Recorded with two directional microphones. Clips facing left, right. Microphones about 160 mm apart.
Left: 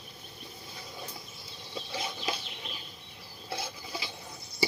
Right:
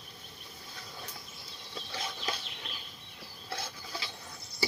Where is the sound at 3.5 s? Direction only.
10° left (ahead or behind).